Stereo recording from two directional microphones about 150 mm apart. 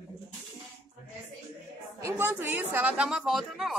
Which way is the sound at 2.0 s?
10° right (ahead or behind).